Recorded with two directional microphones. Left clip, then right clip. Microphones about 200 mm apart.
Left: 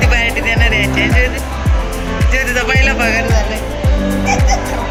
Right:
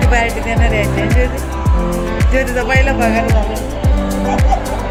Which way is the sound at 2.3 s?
30° right (ahead or behind).